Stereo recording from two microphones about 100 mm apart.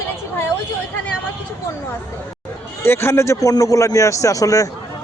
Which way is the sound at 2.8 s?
25° left (ahead or behind).